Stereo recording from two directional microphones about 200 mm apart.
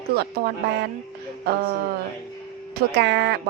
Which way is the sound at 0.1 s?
50° right (ahead or behind).